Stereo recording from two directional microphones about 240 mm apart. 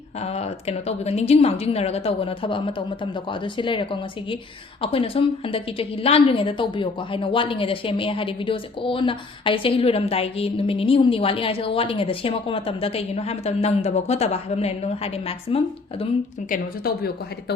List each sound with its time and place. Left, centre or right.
0.2 s a woman's voice: left
16.5 s a woman's voice: left